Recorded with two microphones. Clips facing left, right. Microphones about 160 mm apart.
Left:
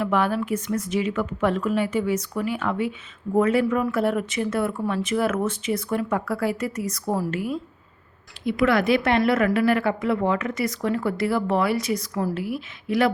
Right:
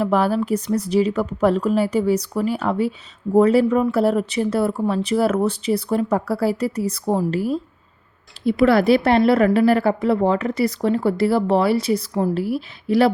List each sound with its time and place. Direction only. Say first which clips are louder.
0.0 s a woman's voice: right 4 dB; 35° right (ahead or behind)